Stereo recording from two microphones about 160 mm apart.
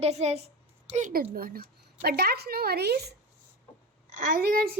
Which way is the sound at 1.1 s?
65° right (ahead or behind).